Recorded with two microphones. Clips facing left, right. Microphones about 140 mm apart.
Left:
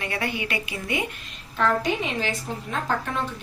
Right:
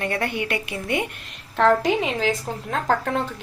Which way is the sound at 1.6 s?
85° right.